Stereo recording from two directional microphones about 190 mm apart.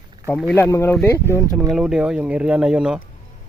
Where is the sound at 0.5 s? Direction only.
10° left (ahead or behind).